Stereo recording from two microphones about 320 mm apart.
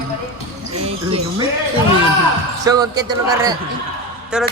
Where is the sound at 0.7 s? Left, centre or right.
Centre.